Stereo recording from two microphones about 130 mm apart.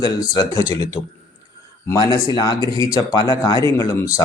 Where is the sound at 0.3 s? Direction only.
30° left (ahead or behind).